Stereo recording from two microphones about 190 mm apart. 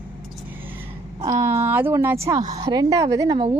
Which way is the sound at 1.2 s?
15° right (ahead or behind).